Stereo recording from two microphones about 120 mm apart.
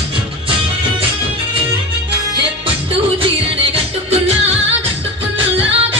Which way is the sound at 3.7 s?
60° right (ahead or behind).